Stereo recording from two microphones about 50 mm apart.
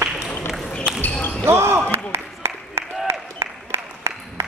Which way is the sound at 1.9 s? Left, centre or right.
Right.